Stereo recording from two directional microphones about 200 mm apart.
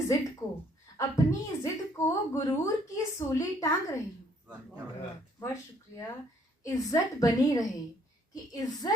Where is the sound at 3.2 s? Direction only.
15° left (ahead or behind).